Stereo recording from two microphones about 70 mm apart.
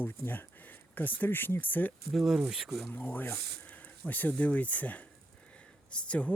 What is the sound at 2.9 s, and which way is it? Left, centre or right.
Speech, left.